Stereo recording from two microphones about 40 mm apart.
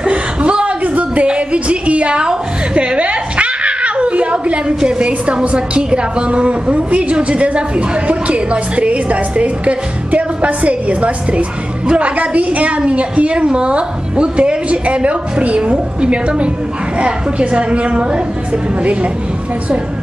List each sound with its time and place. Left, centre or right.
0.0 s chuckle: right
1.2 s a sound: right
4.7 s a woman's voice: right